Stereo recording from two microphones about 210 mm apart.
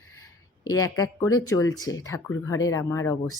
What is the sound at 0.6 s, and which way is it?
A woman's voice, 15° left (ahead or behind).